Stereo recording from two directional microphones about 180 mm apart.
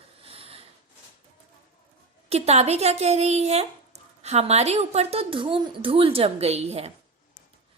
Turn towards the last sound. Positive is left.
turn(degrees=-35)  # may be behind; listen again after turning